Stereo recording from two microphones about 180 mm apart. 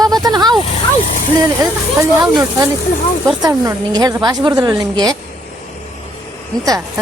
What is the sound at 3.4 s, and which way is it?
Speech, 20° right (ahead or behind).